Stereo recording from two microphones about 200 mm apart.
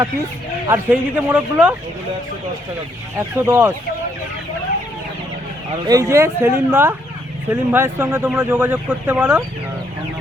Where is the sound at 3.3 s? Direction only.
10° right (ahead or behind).